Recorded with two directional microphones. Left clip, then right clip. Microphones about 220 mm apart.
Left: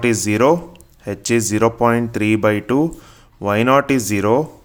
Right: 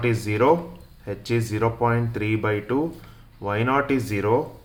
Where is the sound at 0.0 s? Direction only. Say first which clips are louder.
Left 6 dB; 55° left (ahead or behind).